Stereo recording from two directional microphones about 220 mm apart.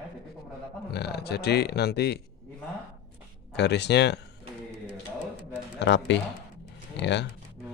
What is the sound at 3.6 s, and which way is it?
Speech, 50° left (ahead or behind).